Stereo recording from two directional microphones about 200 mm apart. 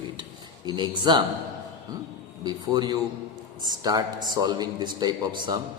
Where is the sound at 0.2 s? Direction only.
20° right (ahead or behind).